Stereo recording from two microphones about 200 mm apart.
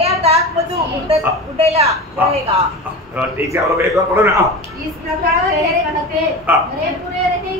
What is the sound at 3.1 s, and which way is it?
Speech, 15° right (ahead or behind).